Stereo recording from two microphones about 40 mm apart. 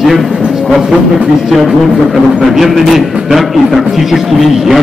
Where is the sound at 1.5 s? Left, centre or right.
Centre.